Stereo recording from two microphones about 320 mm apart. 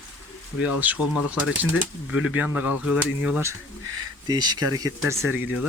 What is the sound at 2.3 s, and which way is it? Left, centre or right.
Speech, centre.